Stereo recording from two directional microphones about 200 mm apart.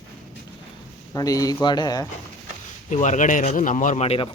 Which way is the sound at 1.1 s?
15° left (ahead or behind).